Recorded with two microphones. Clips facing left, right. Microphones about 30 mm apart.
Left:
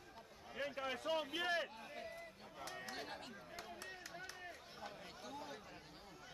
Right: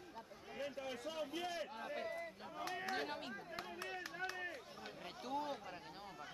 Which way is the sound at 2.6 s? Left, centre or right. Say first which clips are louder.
Right 6 dB; right.